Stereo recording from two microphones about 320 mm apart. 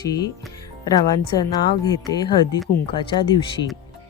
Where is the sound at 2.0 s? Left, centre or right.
Centre.